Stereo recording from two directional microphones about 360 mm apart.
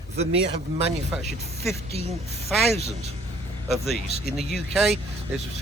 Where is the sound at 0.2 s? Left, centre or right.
Centre.